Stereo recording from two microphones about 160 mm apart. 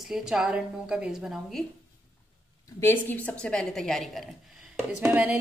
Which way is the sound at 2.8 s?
15° left (ahead or behind).